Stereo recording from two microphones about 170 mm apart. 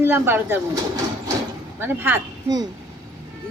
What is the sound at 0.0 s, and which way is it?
Speech, 15° right (ahead or behind).